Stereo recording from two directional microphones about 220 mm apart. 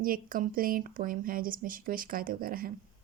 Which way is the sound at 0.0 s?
40° right (ahead or behind).